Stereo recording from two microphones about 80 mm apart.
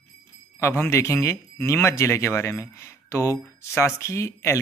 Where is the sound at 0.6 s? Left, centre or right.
Left.